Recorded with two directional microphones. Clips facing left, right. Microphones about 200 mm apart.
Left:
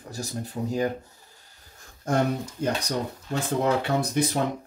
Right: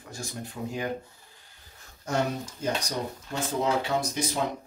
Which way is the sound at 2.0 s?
55° left (ahead or behind).